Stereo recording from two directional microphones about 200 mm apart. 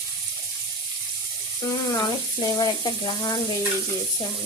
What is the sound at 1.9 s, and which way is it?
Speech, 20° left (ahead or behind).